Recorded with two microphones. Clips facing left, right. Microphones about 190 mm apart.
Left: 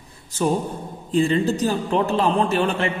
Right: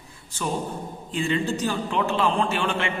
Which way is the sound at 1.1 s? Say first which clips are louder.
Left 6 dB; 35° left (ahead or behind).